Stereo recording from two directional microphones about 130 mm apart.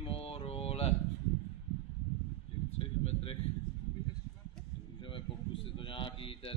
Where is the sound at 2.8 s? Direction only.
45° left (ahead or behind).